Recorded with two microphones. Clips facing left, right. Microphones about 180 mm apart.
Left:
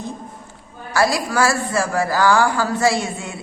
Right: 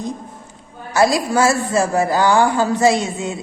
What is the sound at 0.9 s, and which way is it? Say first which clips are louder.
A woman's voice: right 3 dB; 20° right (ahead or behind).